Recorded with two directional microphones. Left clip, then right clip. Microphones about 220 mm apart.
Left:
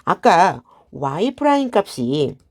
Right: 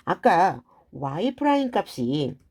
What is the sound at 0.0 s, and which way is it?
Speech, 25° left (ahead or behind).